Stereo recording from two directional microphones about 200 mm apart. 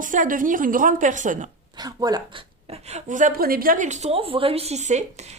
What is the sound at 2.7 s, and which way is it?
A woman's voice, 35° right (ahead or behind).